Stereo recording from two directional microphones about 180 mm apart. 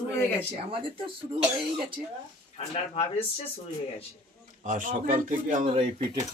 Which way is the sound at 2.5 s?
35° left (ahead or behind).